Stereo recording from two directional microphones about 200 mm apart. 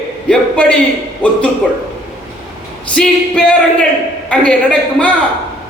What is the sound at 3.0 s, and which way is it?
A man's voice, 5° left (ahead or behind).